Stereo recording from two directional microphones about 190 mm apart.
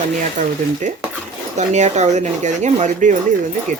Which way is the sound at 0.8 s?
40° right (ahead or behind).